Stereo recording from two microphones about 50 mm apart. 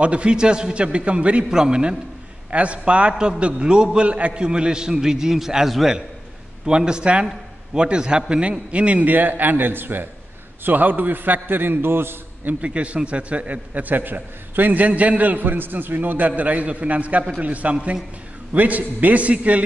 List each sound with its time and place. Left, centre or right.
0.0 s a man's voice: right
9.0 s a man's voice: right
12.6 s a man's voice: right